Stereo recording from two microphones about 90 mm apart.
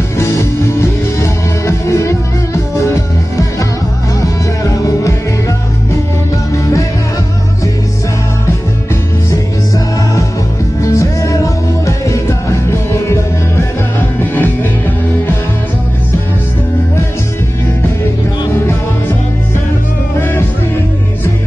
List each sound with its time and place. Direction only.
0.2 s music: 35° left (ahead or behind)
6.5 s music: 35° left (ahead or behind)
10.8 s music: 35° left (ahead or behind)
20.2 s music: 25° left (ahead or behind)